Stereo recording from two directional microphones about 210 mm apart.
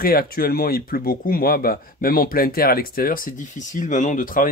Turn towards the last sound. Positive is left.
turn(degrees=40)  # may be behind; listen again after turning